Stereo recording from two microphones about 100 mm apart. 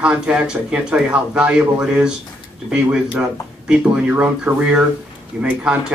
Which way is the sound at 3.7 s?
10° right (ahead or behind).